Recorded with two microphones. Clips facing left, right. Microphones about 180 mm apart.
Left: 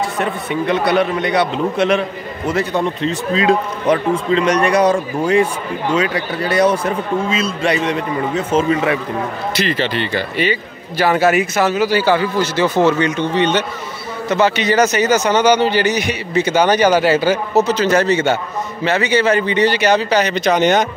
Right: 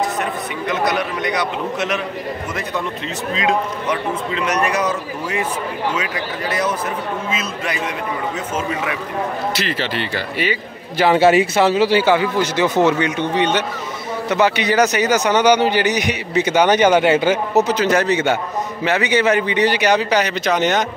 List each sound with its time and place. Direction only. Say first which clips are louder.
0.2 s a man's voice: left 4 dB; 30° left (ahead or behind)
5.9 s a man's voice: left 6 dB; 35° left (ahead or behind)
9.6 s speech: left 4 dB; 5° right (ahead or behind)
11.0 s a man's voice: right 1 dB; 25° right (ahead or behind); by 20.8 s centre (ahead or behind)